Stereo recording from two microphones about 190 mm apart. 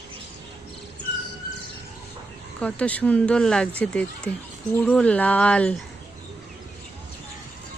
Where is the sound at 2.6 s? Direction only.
5° left (ahead or behind).